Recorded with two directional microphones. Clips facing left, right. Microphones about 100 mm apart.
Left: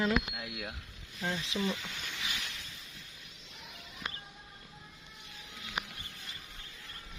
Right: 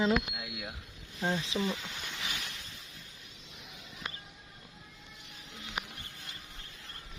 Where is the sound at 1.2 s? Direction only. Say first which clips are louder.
Right 4 dB; 30° right (ahead or behind).